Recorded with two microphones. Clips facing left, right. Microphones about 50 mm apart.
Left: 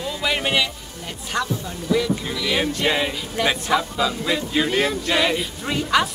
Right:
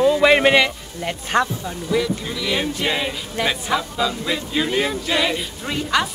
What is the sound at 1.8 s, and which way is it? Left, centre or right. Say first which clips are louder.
Speech: even; centre.